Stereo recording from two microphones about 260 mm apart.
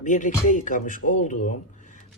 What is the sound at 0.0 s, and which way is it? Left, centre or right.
Music, left.